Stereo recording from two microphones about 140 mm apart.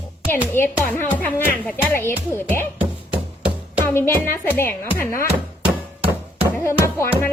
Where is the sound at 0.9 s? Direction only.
15° left (ahead or behind).